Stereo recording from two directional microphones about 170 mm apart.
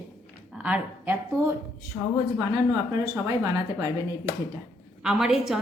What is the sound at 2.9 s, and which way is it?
Speech, 20° right (ahead or behind).